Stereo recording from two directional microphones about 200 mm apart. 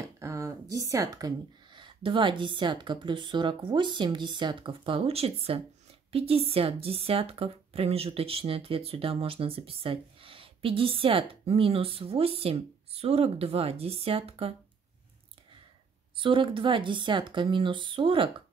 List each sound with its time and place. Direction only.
0.0 s a sound: 15° right (ahead or behind)
0.8 s speech: 15° right (ahead or behind)
16.2 s speech: 25° right (ahead or behind)